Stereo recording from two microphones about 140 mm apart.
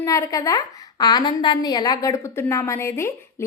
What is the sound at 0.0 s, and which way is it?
A woman's voice, 25° left (ahead or behind).